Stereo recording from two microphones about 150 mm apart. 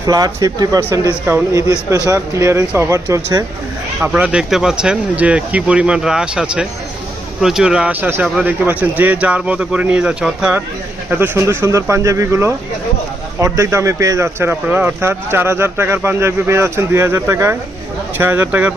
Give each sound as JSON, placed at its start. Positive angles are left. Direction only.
{"t": 0.0, "sound": "speech", "side_deg": -25}
{"t": 4.0, "sound": "speech", "side_deg": -10}
{"t": 11.1, "sound": "speech", "side_deg": -15}